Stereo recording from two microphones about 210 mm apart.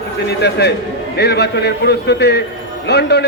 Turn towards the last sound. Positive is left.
turn(degrees=50)  # may be behind; listen again after turning